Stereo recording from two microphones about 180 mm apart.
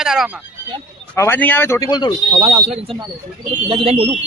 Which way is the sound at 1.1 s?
15° left (ahead or behind).